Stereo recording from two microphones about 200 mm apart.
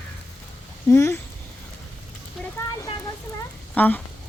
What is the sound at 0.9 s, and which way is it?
Speech, 15° left (ahead or behind).